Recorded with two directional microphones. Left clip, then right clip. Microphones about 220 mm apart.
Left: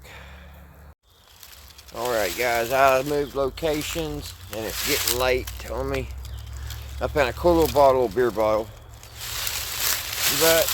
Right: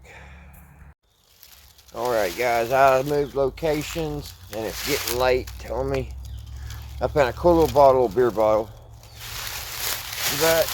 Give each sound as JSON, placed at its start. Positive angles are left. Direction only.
{"t": 1.9, "sound": "speech", "side_deg": 0}
{"t": 9.8, "sound": "a sound", "side_deg": -5}
{"t": 10.4, "sound": "speech", "side_deg": 25}